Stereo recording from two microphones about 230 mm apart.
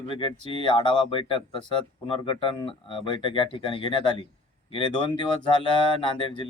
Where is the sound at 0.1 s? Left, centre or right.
Left.